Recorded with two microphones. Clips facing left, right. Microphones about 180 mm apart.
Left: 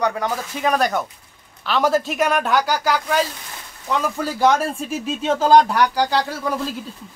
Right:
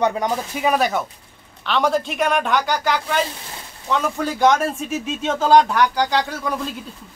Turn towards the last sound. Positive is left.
turn(degrees=5)  # may be behind; listen again after turning